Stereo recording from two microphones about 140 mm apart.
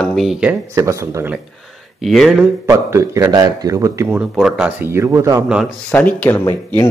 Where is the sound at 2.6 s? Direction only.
20° right (ahead or behind).